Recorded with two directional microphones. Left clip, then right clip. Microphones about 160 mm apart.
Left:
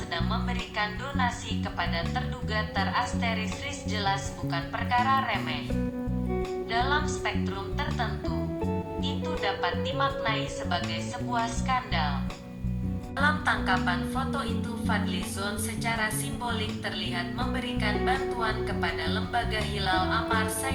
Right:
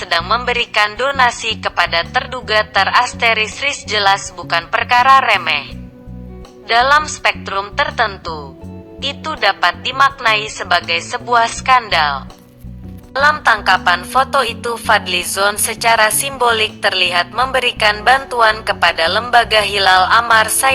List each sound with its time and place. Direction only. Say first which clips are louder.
0.0 s music: right 17 dB; 40° right (ahead or behind)
6.7 s music: right 17 dB; 40° right (ahead or behind)
13.1 s music: right 14 dB; 35° right (ahead or behind)